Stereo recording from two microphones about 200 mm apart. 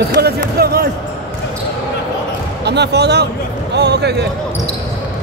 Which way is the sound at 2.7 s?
55° right (ahead or behind).